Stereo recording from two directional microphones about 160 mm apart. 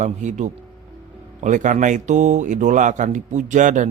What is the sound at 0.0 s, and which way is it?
Speech, 50° right (ahead or behind).